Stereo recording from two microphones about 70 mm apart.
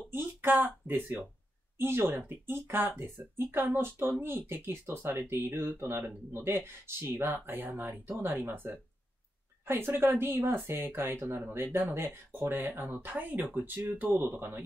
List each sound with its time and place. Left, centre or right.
0.1 s speech: right